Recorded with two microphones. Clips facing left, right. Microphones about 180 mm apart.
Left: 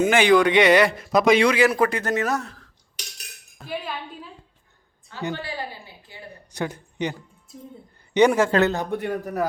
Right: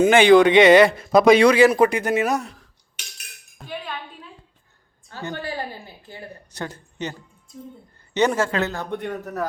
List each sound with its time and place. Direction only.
0.0 s speech: 25° right (ahead or behind)
1.6 s a man's voice: 20° right (ahead or behind)
3.7 s a sound: 5° left (ahead or behind)
5.3 s a woman's voice: 45° right (ahead or behind)
6.5 s a man's voice: 15° left (ahead or behind)